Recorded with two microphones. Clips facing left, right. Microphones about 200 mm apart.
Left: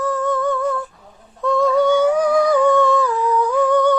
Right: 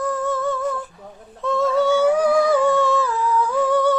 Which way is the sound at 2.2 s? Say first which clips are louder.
Left 2 dB; 30° right (ahead or behind).